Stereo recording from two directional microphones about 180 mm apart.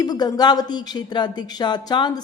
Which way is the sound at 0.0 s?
20° left (ahead or behind).